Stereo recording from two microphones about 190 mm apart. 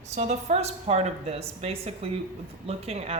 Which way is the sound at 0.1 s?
35° right (ahead or behind).